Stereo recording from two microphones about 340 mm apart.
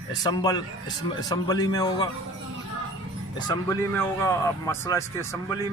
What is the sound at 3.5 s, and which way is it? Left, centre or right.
A man's voice, centre.